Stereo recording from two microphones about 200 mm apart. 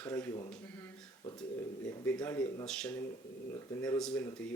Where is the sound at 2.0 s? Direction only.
10° left (ahead or behind).